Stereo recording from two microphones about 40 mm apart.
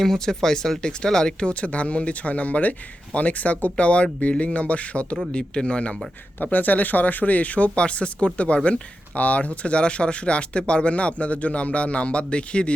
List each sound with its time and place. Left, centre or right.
0.0 s speech: centre; by 6.0 s left
6.4 s speech: left